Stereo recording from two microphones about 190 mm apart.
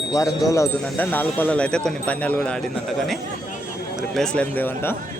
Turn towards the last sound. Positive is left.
turn(degrees=10)  # may be behind; listen again after turning